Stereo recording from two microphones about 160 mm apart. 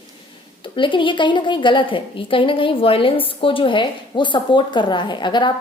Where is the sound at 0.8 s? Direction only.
30° left (ahead or behind).